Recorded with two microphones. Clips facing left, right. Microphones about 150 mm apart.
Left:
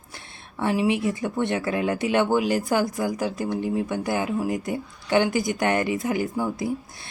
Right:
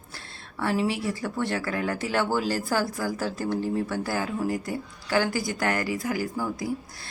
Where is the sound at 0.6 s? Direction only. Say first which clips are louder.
Left 4 dB; 20° left (ahead or behind).